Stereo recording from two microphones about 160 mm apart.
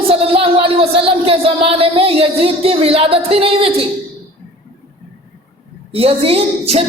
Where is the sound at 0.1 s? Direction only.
35° right (ahead or behind).